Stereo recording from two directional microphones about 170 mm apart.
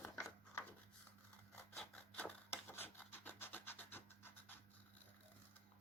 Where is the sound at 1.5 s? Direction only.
5° left (ahead or behind).